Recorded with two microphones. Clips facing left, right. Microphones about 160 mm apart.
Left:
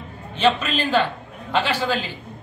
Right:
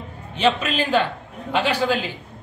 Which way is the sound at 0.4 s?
10° right (ahead or behind).